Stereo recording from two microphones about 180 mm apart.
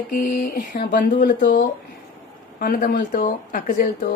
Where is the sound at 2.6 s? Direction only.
55° left (ahead or behind).